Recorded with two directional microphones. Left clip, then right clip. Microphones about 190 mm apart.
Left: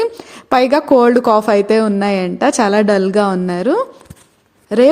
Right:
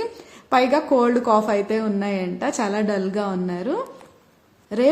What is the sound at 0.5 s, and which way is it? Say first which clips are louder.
A woman's voice: left 7 dB; 50° left (ahead or behind).